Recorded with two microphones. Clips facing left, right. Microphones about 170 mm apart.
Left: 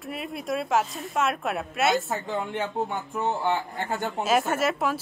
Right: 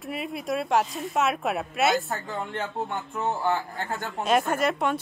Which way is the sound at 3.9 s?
Centre (ahead or behind).